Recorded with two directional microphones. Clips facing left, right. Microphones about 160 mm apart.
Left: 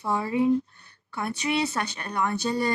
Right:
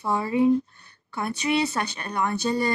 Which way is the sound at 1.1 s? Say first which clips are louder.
Right 2 dB; 25° right (ahead or behind).